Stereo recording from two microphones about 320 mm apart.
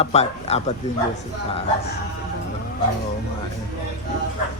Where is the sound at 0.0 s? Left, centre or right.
Centre.